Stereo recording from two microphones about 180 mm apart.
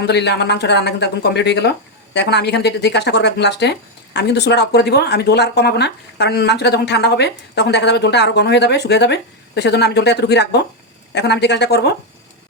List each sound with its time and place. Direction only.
0.0 s speech: 70° left (ahead or behind)